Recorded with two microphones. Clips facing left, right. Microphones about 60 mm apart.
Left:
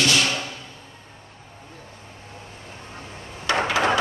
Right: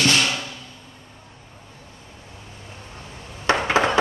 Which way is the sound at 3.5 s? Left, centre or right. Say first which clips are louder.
Right 2 dB; right.